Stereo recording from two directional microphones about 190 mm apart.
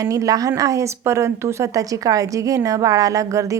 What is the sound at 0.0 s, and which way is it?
A woman's voice, 15° right (ahead or behind).